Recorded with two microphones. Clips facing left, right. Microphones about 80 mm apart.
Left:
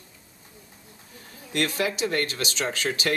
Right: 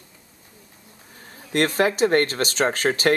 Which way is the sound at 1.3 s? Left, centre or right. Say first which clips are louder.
Right 6 dB; right.